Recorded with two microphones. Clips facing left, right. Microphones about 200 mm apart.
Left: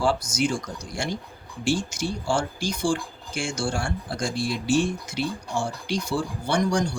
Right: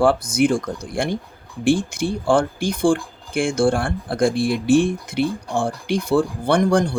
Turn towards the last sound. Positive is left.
turn(degrees=-55)  # may be behind; listen again after turning